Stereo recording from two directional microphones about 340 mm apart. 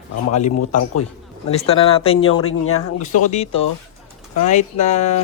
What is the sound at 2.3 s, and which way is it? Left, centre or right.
Speech, left.